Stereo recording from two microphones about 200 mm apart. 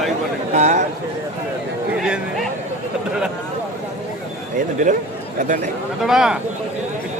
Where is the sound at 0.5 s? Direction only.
35° right (ahead or behind).